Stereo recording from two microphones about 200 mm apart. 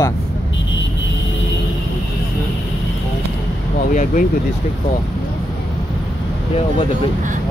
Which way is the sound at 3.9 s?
40° left (ahead or behind).